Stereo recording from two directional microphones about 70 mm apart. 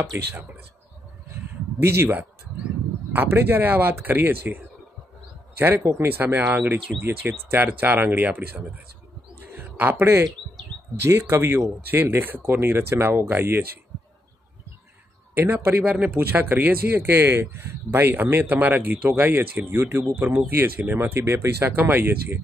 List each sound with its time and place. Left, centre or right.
0.3 s speech: right
1.3 s a sound: right
3.1 s speech: right
5.6 s speech: right
6.1 s speech: right
9.4 s a sound: right
11.1 s speech: right
15.3 s speech: right
15.8 s speech: centre; by 20.0 s right
20.0 s speech: right